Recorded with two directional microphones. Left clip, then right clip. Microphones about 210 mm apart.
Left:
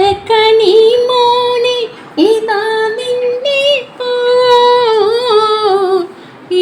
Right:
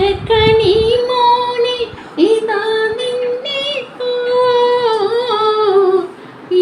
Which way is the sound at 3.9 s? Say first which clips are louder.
Left 4 dB; 55° left (ahead or behind).